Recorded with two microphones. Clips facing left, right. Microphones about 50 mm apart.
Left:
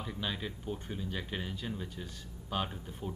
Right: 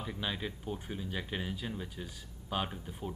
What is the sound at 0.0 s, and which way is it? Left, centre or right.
Speech, centre.